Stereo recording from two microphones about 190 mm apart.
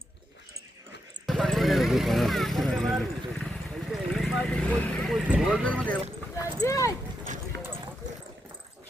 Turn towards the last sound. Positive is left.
turn(degrees=-65)  # may be behind; listen again after turning